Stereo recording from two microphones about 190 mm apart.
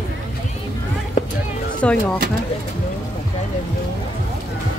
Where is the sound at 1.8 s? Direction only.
5° left (ahead or behind).